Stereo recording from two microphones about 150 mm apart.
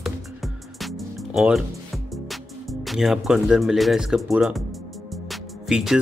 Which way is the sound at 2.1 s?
Centre (ahead or behind).